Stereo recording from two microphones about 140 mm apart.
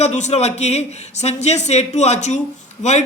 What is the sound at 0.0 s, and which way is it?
Speech, 55° left (ahead or behind).